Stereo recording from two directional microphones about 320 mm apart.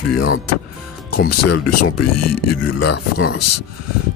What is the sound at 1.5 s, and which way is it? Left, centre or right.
Speech, left.